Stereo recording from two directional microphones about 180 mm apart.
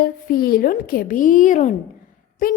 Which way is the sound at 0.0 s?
55° left (ahead or behind).